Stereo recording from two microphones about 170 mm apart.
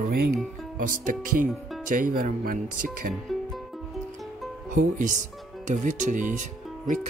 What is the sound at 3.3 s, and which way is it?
Music, centre (ahead or behind).